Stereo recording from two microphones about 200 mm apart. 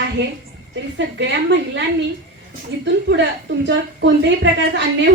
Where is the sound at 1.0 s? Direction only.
65° right (ahead or behind).